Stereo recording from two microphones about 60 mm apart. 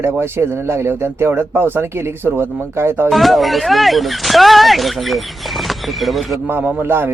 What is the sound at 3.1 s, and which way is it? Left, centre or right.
Speech, centre.